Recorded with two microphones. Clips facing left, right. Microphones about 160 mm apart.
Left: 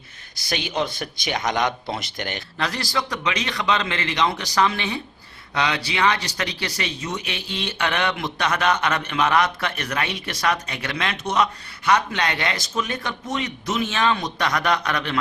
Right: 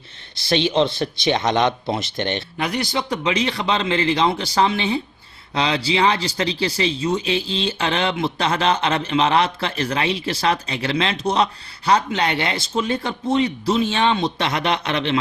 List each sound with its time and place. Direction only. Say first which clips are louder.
0.3 s speech: right 7 dB; 25° right (ahead or behind)